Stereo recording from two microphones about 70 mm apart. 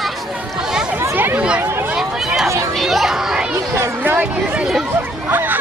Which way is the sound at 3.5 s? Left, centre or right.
Right.